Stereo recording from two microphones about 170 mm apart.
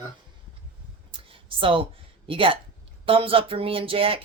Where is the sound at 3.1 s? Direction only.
30° right (ahead or behind).